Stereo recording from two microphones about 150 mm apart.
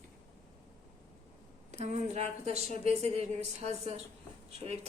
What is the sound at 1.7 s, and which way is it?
A woman's voice, 50° right (ahead or behind).